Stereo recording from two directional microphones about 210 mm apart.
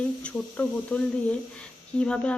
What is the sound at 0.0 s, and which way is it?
A woman's voice, 5° left (ahead or behind).